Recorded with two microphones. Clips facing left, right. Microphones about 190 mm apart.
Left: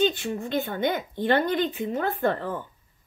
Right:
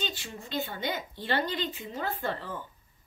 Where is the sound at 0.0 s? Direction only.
60° left (ahead or behind).